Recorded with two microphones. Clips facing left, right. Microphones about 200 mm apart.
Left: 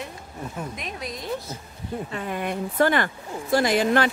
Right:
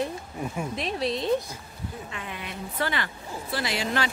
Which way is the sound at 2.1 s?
45° left (ahead or behind).